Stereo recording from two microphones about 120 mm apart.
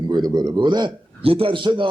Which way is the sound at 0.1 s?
35° right (ahead or behind).